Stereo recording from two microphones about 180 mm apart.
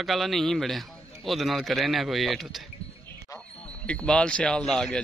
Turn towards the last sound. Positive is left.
turn(degrees=5)  # may be behind; listen again after turning